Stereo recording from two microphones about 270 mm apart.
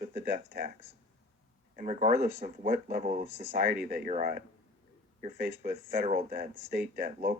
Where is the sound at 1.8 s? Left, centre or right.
Right.